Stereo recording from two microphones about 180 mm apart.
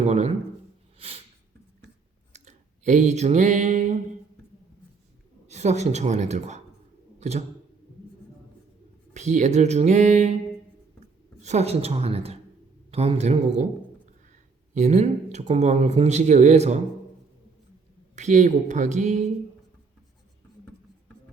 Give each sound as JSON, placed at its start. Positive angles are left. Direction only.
{"t": 0.0, "sound": "speech", "side_deg": -40}
{"t": 0.9, "sound": "a sound", "side_deg": -35}
{"t": 2.3, "sound": "a sound", "side_deg": -40}
{"t": 5.5, "sound": "speech", "side_deg": -40}
{"t": 9.1, "sound": "speech", "side_deg": -40}
{"t": 11.4, "sound": "speech", "side_deg": -35}
{"t": 14.7, "sound": "speech", "side_deg": -40}
{"t": 18.2, "sound": "speech", "side_deg": -40}